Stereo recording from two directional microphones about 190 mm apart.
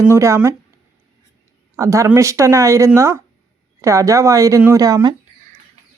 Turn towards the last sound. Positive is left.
turn(degrees=-20)  # may be behind; listen again after turning